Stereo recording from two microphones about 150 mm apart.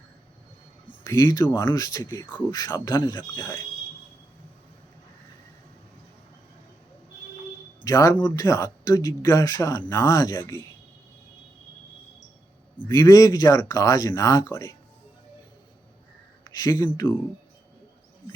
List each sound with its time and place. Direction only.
1.0 s speech: 25° left (ahead or behind)
7.9 s speech: 25° left (ahead or behind)
12.9 s speech: 25° left (ahead or behind)
16.4 s speech: 25° left (ahead or behind)